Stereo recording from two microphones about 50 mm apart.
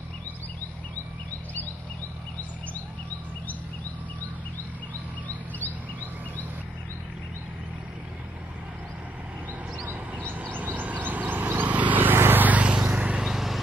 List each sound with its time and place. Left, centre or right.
9.8 s vehicle: right
13.2 s vehicle: centre